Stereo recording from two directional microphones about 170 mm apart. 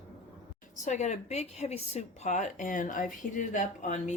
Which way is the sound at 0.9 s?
45° left (ahead or behind).